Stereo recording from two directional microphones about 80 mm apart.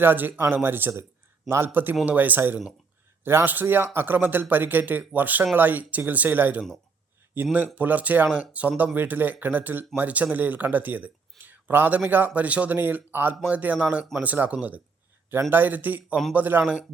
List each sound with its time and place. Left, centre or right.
0.0 s speech: right